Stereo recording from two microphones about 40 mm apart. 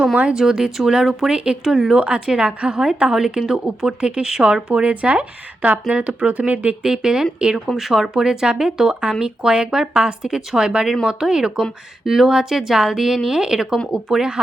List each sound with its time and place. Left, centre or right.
0.3 s a woman's voice: centre
2.0 s a woman's voice: right
6.8 s a woman's voice: centre
7.8 s a woman's voice: centre